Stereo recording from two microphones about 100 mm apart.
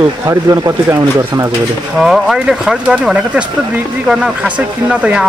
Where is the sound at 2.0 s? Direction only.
5° right (ahead or behind).